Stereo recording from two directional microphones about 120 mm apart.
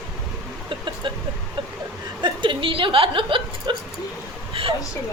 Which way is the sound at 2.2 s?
45° right (ahead or behind).